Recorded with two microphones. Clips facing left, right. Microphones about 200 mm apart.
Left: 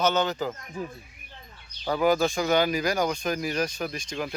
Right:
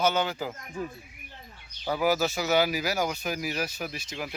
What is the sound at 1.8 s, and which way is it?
Speech, 5° right (ahead or behind).